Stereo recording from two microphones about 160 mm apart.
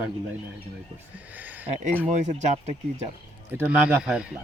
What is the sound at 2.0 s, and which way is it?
Speech, 45° right (ahead or behind).